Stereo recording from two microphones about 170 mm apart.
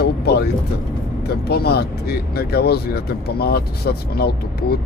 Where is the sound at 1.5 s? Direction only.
70° left (ahead or behind).